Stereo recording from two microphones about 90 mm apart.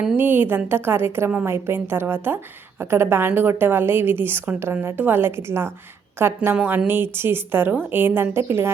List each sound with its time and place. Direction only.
0.2 s a woman's voice: 25° right (ahead or behind)